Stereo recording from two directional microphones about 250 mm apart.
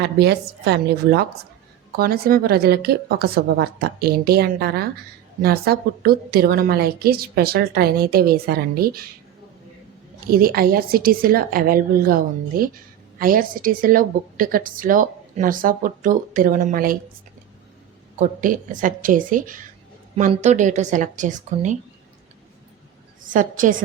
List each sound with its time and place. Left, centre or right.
0.0 s a woman's voice: right
10.2 s a woman's voice: right
18.2 s a woman's voice: right
23.2 s a woman's voice: right